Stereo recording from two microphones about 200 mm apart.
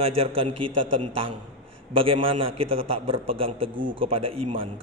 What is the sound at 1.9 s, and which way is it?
A man's voice, 25° right (ahead or behind).